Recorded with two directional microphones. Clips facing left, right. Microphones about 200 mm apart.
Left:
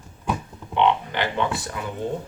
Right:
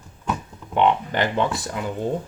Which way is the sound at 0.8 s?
45° right (ahead or behind).